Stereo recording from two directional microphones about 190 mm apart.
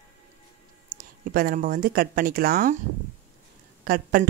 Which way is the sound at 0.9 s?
50° right (ahead or behind).